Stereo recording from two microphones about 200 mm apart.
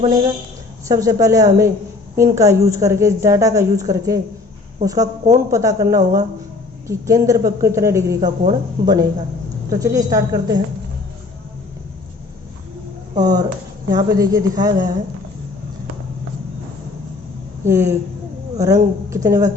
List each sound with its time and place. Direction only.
0.9 s speech: 15° right (ahead or behind)
13.2 s speech: 20° right (ahead or behind)
17.7 s speech: 15° right (ahead or behind)